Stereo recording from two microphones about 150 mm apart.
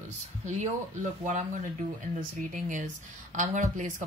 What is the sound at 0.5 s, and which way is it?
Speech, 55° right (ahead or behind).